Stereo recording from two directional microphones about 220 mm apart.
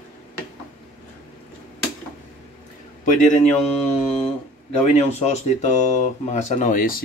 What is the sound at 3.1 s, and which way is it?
Speech, 35° left (ahead or behind).